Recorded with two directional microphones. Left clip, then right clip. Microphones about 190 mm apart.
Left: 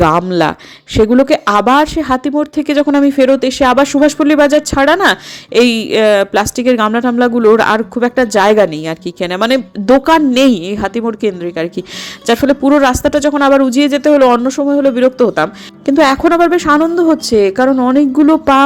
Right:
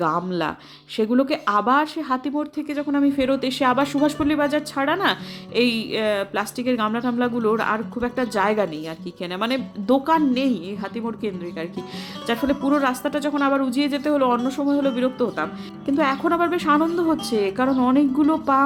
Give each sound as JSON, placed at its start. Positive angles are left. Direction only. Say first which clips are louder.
{"t": 0.0, "sound": "speech", "louder": "left 12 dB", "side_deg": 40}